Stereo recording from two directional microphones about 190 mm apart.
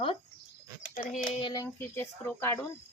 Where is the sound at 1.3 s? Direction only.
25° left (ahead or behind).